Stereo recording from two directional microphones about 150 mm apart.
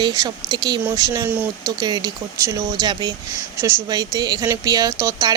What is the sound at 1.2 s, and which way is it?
Speech, 15° right (ahead or behind).